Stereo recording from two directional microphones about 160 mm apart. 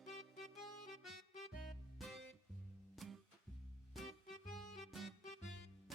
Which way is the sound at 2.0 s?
Centre (ahead or behind).